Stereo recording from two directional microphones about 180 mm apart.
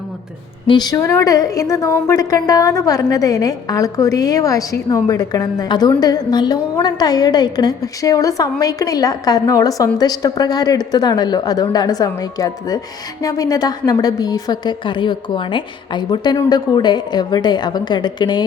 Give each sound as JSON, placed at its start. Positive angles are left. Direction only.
{"t": 0.7, "sound": "a woman's voice", "side_deg": 20}